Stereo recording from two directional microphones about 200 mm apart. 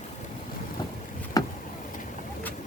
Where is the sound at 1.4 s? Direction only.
20° left (ahead or behind).